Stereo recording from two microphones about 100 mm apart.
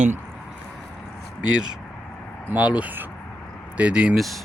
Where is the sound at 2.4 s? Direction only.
10° right (ahead or behind).